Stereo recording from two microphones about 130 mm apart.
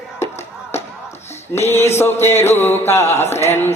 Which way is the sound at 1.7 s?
20° left (ahead or behind).